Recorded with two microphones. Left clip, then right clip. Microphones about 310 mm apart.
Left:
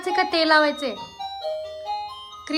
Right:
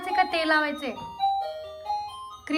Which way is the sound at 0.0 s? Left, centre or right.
Centre.